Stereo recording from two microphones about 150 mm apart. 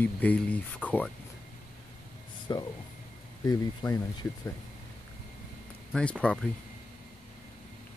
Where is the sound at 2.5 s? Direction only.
25° left (ahead or behind).